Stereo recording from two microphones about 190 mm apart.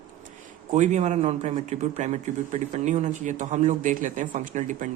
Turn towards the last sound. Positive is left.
turn(degrees=-40)  # may be behind; listen again after turning